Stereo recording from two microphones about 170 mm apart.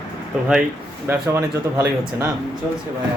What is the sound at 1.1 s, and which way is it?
Speech, 15° right (ahead or behind).